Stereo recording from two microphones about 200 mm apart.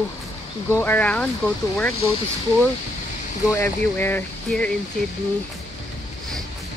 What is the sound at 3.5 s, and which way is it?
Speech, 10° left (ahead or behind).